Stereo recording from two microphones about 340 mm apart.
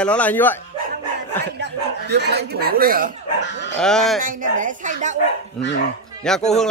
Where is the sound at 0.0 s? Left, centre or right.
Centre.